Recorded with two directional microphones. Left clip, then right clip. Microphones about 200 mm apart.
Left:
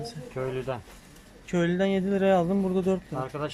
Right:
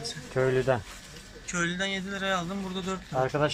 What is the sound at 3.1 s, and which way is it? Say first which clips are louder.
Speech: right 6 dB; 5° right (ahead or behind).